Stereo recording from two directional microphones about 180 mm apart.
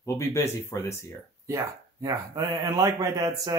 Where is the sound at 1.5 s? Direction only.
20° right (ahead or behind).